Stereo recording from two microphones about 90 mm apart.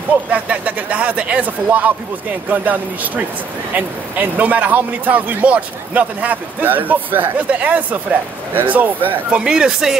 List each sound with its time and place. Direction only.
0.3 s speech: 15° right (ahead or behind)
9.4 s speech: 10° right (ahead or behind)